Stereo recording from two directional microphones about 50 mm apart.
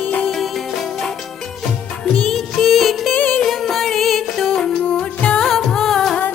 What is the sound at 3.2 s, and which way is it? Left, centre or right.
Music, left.